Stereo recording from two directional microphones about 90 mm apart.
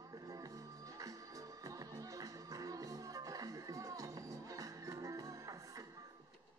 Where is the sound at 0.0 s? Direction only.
40° right (ahead or behind).